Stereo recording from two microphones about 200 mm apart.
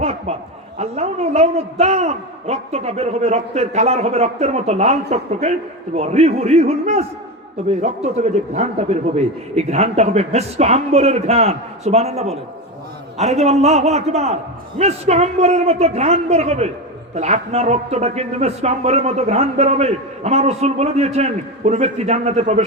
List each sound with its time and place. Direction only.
0.0 s snicker: 30° right (ahead or behind)
0.8 s speech: 30° right (ahead or behind)